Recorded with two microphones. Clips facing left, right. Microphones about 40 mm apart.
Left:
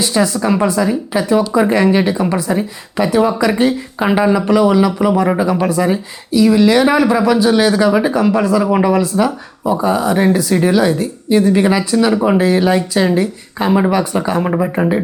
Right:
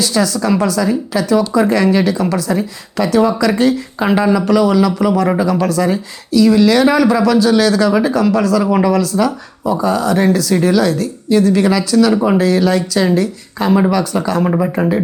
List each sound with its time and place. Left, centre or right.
0.0 s speech: left
12.1 s speech: centre
12.4 s speech: left
14.4 s speech: centre